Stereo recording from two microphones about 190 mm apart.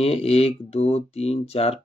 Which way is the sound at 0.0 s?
30° left (ahead or behind).